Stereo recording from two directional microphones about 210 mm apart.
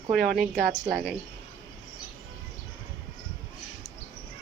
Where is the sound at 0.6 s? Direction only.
50° right (ahead or behind).